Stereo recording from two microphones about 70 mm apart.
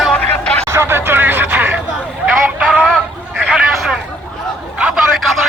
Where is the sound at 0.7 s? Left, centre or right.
Right.